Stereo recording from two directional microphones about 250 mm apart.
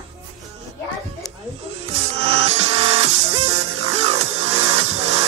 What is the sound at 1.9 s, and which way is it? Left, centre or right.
Music, right.